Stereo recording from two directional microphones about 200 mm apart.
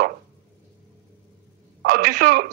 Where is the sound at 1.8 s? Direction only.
50° right (ahead or behind).